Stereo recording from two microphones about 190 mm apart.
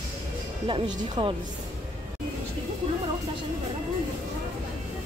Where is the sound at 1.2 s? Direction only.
25° right (ahead or behind).